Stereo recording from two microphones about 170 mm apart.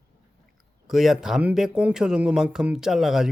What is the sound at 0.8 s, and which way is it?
Speech, centre (ahead or behind).